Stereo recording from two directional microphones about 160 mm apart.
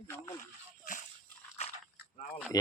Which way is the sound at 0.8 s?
55° left (ahead or behind).